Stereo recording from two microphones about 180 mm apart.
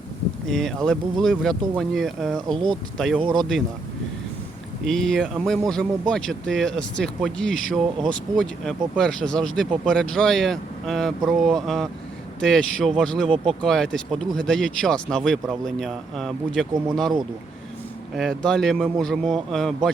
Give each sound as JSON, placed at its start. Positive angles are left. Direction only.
{"t": 0.5, "sound": "speech", "side_deg": 0}
{"t": 4.9, "sound": "speech", "side_deg": 5}
{"t": 13.3, "sound": "speech", "side_deg": -30}
{"t": 13.6, "sound": "speech", "side_deg": 5}
{"t": 18.2, "sound": "speech", "side_deg": 0}